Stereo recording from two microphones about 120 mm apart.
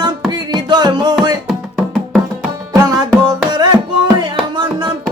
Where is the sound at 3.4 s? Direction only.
35° right (ahead or behind).